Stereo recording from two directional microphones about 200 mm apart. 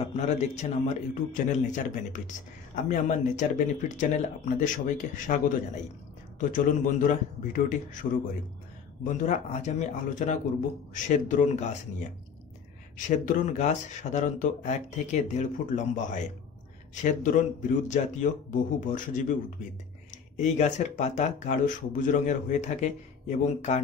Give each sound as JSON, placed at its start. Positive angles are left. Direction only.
{"t": 0.0, "sound": "a man's voice", "side_deg": 35}
{"t": 6.5, "sound": "a man's voice", "side_deg": 40}
{"t": 12.9, "sound": "a man's voice", "side_deg": 40}
{"t": 20.3, "sound": "a man's voice", "side_deg": 35}